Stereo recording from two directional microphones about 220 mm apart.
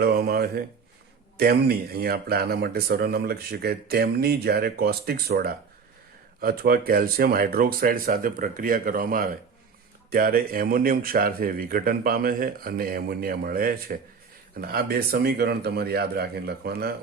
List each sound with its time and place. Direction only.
0.0 s a man's voice: 45° right (ahead or behind)